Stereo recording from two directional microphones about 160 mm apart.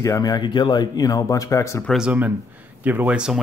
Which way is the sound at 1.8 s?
Centre (ahead or behind).